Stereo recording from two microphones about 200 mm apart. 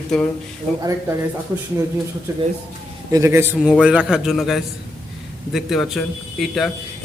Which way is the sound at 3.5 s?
Centre (ahead or behind).